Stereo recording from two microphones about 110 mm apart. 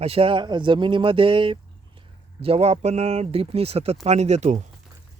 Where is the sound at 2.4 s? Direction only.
70° right (ahead or behind).